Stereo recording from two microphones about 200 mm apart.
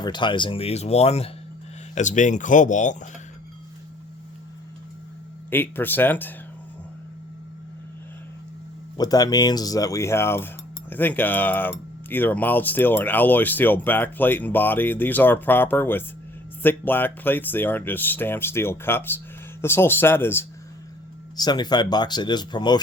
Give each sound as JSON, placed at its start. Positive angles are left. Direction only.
{"t": 0.0, "sound": "speech", "side_deg": 20}
{"t": 5.5, "sound": "cutlery", "side_deg": 10}
{"t": 9.0, "sound": "cutlery", "side_deg": 20}
{"t": 21.3, "sound": "speech", "side_deg": 20}